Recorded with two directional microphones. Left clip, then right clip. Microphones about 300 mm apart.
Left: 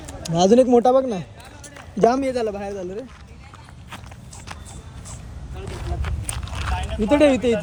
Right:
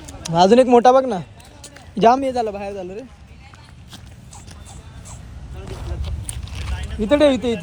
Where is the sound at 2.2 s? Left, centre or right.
Centre.